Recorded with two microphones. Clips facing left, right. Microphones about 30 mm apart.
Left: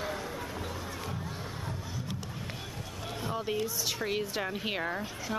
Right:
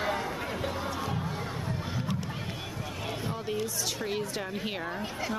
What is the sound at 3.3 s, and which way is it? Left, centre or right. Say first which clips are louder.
A woman's voice: even; centre.